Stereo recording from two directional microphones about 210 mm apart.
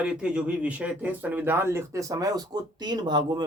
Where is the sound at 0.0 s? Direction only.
5° right (ahead or behind).